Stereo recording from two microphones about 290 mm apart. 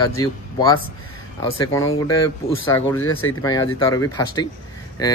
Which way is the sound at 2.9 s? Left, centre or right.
Left.